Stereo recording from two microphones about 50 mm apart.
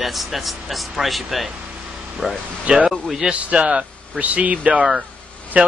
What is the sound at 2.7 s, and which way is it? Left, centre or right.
A man's voice, right.